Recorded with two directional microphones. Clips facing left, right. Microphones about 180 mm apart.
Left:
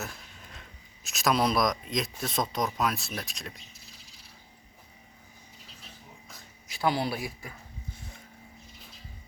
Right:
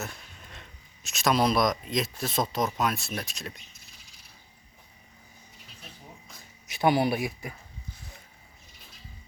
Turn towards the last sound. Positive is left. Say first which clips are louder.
# right 5 dB
turn(degrees=-15)  # may be behind; listen again after turning